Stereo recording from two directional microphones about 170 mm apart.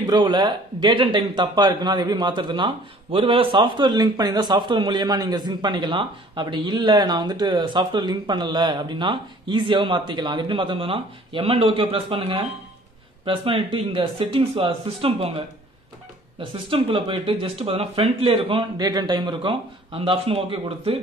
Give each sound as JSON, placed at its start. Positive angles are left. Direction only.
{"t": 0.0, "sound": "speech", "side_deg": -25}